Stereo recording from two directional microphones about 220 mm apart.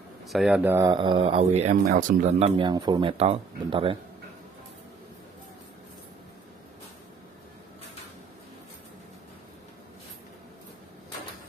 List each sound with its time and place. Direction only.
0.3 s speech: centre (ahead or behind)
0.7 s speech: 20° right (ahead or behind)